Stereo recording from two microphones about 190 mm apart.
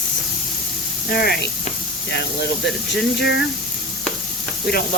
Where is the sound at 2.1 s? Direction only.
65° left (ahead or behind).